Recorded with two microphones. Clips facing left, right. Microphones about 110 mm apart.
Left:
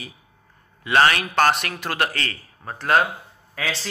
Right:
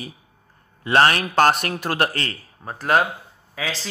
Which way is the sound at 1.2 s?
15° right (ahead or behind).